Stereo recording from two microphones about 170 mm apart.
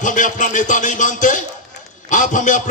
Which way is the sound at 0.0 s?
50° left (ahead or behind).